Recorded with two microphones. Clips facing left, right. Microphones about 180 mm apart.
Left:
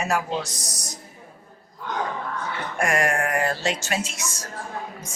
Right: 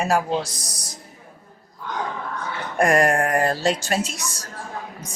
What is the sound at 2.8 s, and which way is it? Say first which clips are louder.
A woman's voice: right 5 dB; 35° right (ahead or behind).